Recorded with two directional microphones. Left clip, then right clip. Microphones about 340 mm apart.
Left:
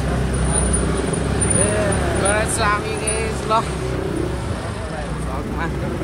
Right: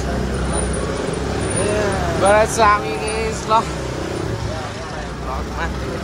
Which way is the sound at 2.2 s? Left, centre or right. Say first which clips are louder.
Right 8 dB; right.